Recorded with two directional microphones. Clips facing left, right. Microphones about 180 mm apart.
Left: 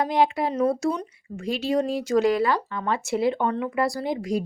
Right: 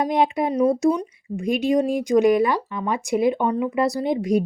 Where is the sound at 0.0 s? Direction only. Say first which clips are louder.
Right 2 dB; 20° right (ahead or behind).